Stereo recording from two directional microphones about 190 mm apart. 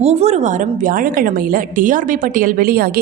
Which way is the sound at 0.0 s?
35° right (ahead or behind).